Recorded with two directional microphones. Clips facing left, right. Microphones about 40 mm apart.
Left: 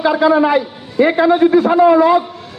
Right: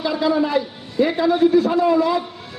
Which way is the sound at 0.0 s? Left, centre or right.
Left.